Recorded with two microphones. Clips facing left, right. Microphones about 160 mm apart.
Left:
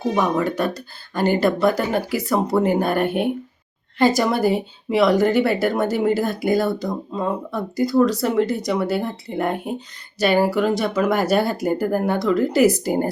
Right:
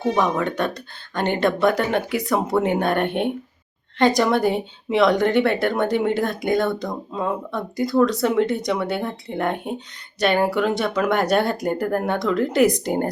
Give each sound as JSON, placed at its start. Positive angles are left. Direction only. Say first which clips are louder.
{"t": 0.1, "sound": "speech", "louder": "left 1 dB", "side_deg": 5}